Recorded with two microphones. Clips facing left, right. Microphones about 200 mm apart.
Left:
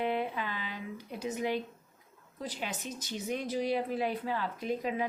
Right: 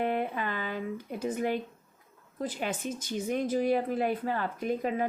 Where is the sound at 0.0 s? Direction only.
50° right (ahead or behind).